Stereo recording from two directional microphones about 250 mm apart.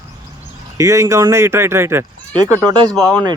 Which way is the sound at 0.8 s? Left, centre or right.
Centre.